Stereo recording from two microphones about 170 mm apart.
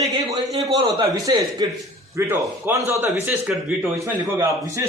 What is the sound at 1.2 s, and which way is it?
A man's voice, 20° right (ahead or behind).